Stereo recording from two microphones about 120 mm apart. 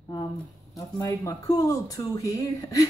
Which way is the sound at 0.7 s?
30° left (ahead or behind).